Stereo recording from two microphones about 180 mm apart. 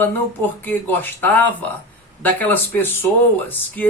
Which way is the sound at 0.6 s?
10° left (ahead or behind).